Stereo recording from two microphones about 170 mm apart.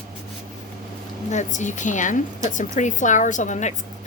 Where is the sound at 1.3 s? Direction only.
45° left (ahead or behind).